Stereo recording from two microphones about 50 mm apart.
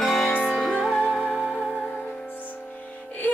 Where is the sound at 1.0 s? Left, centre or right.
Centre.